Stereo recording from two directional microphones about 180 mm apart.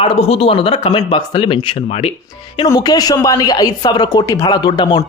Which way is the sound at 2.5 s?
20° left (ahead or behind).